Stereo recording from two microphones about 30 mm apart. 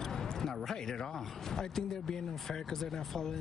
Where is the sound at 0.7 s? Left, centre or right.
Centre.